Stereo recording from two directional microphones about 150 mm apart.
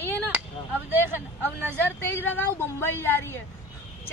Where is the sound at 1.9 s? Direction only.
15° left (ahead or behind).